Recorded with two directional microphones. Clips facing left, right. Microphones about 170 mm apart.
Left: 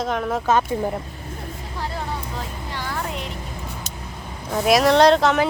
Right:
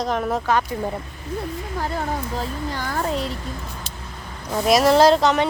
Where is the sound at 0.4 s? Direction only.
20° left (ahead or behind).